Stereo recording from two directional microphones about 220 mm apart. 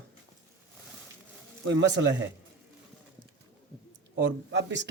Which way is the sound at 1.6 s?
55° right (ahead or behind).